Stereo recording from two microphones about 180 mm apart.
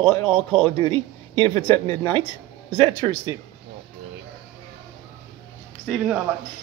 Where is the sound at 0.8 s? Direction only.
30° right (ahead or behind).